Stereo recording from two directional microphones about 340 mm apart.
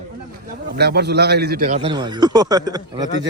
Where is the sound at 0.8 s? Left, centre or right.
Right.